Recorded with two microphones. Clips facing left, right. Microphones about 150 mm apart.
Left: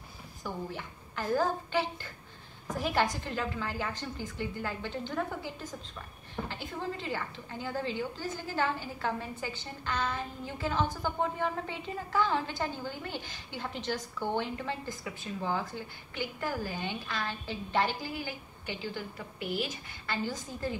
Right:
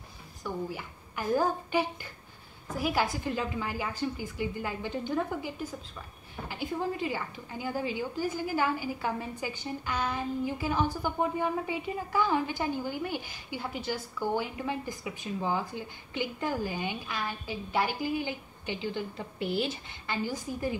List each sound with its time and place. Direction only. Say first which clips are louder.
0.4 s a woman's voice: right 3 dB; 10° right (ahead or behind)
19.4 s speech: right 4 dB; 30° right (ahead or behind)
20.1 s a woman's voice: right 2 dB; 15° right (ahead or behind)